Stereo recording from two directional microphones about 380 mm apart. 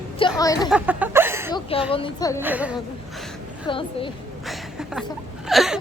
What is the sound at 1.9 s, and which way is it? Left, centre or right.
Speech, centre.